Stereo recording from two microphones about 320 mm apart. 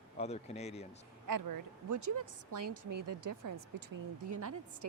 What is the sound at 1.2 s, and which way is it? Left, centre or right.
A woman's voice, right.